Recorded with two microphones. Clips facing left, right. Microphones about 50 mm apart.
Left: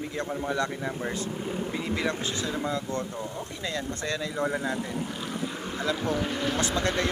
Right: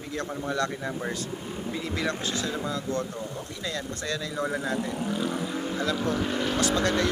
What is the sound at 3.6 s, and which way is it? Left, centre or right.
Speech, left.